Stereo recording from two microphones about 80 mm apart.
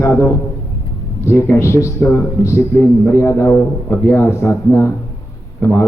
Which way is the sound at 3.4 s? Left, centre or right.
Left.